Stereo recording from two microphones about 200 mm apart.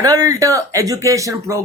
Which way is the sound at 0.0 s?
15° right (ahead or behind).